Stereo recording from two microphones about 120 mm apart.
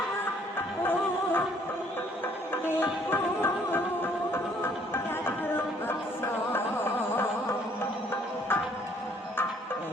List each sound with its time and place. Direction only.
0.8 s music: 15° left (ahead or behind)
2.6 s music: 20° left (ahead or behind)